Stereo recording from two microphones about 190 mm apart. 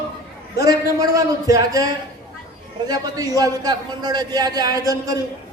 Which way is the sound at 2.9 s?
20° right (ahead or behind).